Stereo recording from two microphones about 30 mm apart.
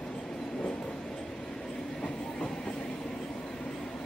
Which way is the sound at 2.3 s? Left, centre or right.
Centre.